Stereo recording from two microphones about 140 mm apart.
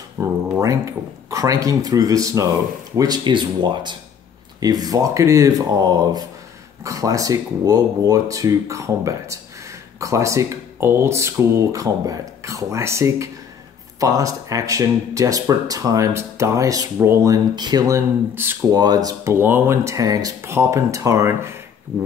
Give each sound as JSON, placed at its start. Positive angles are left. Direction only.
{"t": 0.2, "sound": "speech", "side_deg": -20}